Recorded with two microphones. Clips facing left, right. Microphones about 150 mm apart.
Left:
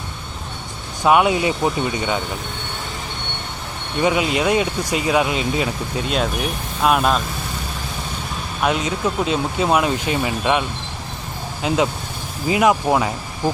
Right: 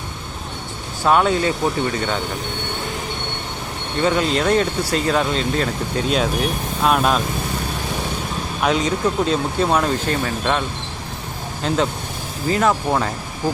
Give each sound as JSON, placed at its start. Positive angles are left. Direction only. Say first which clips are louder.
{"t": 1.0, "sound": "speech", "louder": "left 1 dB", "side_deg": 10}
{"t": 4.0, "sound": "speech", "louder": "even", "side_deg": 10}
{"t": 8.6, "sound": "speech", "louder": "right 1 dB", "side_deg": 5}
{"t": 12.5, "sound": "speech", "louder": "left 2 dB", "side_deg": 10}